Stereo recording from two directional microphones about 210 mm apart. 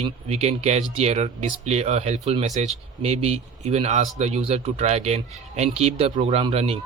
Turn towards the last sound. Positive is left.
turn(degrees=-25)  # may be behind; listen again after turning